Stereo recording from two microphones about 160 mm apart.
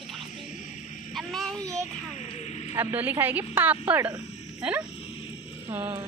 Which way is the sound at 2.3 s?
45° left (ahead or behind).